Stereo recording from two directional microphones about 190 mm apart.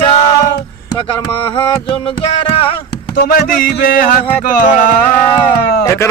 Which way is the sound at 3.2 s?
50° left (ahead or behind).